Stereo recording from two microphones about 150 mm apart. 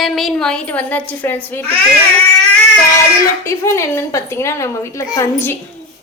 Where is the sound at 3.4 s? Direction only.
20° left (ahead or behind).